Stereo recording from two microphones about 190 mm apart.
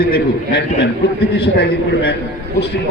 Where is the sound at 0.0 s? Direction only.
60° left (ahead or behind).